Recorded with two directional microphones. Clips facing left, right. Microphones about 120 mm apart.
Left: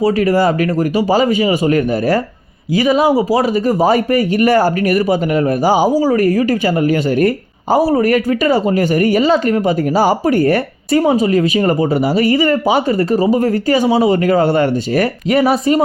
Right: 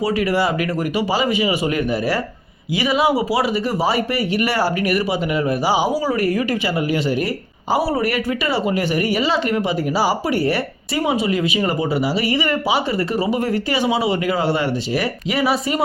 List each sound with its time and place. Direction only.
0.0 s speech: 40° left (ahead or behind)